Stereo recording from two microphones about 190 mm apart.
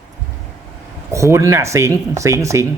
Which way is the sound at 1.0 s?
15° right (ahead or behind).